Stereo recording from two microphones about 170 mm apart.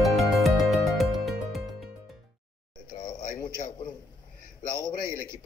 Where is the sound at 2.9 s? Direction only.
30° left (ahead or behind).